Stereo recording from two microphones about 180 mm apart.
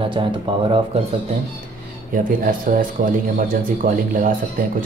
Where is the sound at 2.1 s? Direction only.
50° right (ahead or behind).